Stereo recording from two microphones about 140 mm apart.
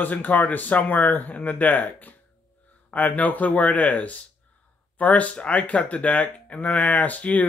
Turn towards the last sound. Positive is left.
turn(degrees=10)  # may be behind; listen again after turning